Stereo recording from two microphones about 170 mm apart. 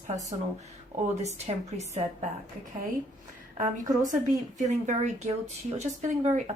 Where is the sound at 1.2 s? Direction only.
40° right (ahead or behind).